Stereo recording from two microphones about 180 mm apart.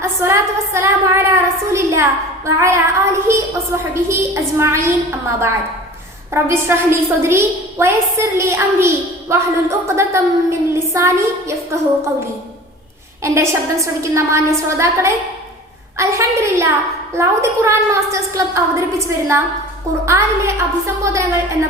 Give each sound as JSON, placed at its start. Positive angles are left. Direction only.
{"t": 0.0, "sound": "a woman's voice", "side_deg": -15}
{"t": 6.3, "sound": "a woman's voice", "side_deg": -15}
{"t": 13.2, "sound": "a woman's voice", "side_deg": -15}